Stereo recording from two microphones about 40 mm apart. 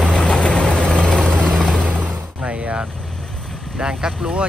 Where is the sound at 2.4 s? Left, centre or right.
Right.